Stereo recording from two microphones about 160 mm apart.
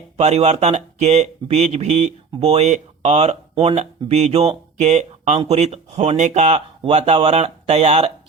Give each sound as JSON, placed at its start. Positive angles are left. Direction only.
{"t": 0.2, "sound": "speech", "side_deg": -45}